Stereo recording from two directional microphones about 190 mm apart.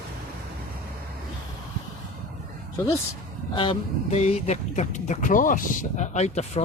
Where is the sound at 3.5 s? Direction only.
25° left (ahead or behind).